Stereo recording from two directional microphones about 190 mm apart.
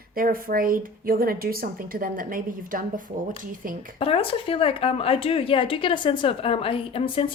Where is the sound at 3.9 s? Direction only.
30° left (ahead or behind).